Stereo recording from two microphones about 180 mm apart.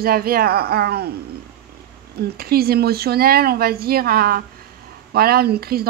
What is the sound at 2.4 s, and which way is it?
Speech, 55° right (ahead or behind).